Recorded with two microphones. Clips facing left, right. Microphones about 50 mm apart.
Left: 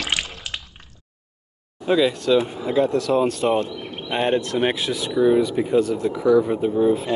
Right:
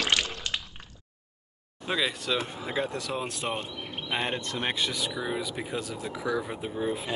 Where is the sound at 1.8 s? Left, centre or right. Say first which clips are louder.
Left 11 dB; centre.